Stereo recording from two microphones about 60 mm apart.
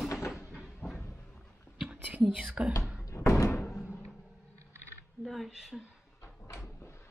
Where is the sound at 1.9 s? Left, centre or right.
Right.